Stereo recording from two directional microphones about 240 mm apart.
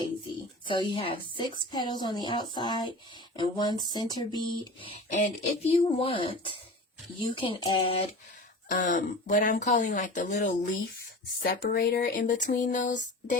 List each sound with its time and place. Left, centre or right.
0.6 s speech: left
8.7 s speech: left